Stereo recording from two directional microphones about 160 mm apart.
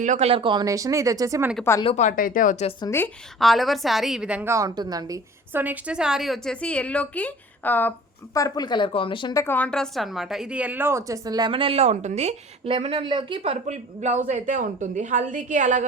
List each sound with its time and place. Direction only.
0.0 s speech: 45° right (ahead or behind); by 1.5 s 20° right (ahead or behind)
2.0 s speech: 55° left (ahead or behind)
2.8 s a woman's voice: 15° left (ahead or behind)
3.4 s a woman's voice: centre (ahead or behind)
4.5 s speech: 20° right (ahead or behind)
5.6 s a woman's voice: 5° right (ahead or behind); by 9.4 s 30° left (ahead or behind)
9.4 s a woman's voice: 10° left (ahead or behind); by 15.9 s 50° right (ahead or behind)